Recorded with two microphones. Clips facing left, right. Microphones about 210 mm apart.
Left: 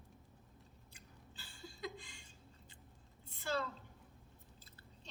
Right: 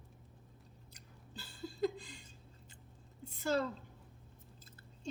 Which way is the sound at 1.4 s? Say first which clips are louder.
Right 11 dB; 35° right (ahead or behind).